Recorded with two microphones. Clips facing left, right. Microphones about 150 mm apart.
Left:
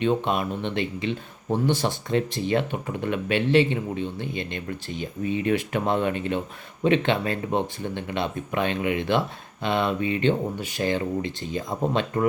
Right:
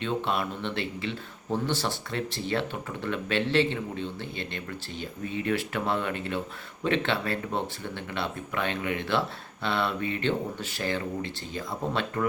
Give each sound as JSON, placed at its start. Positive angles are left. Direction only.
{"t": 0.0, "sound": "speech", "side_deg": 20}